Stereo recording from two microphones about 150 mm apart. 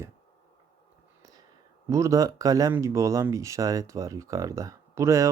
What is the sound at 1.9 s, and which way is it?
Speech, 20° right (ahead or behind).